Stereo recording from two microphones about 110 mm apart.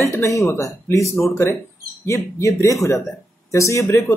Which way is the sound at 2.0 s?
30° left (ahead or behind).